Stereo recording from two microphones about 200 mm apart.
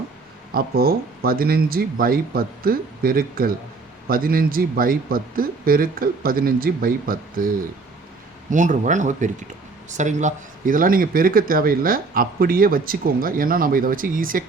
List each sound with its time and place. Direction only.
0.5 s speech: 50° right (ahead or behind)